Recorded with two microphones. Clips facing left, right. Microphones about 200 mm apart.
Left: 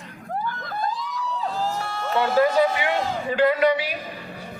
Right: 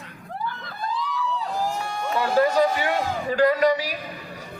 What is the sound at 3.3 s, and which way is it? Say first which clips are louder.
Speech: even; 40° right (ahead or behind).